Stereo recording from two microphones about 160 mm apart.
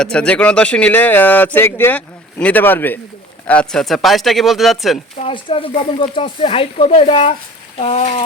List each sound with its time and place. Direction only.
0.0 s speech: 5° left (ahead or behind)
5.2 s speech: 35° left (ahead or behind)